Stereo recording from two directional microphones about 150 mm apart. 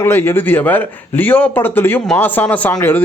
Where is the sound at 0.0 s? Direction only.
15° left (ahead or behind).